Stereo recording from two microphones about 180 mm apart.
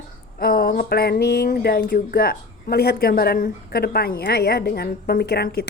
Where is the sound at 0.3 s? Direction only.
55° left (ahead or behind).